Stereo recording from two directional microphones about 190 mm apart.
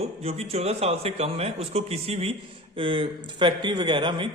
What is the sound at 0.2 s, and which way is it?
A man's voice, 30° right (ahead or behind).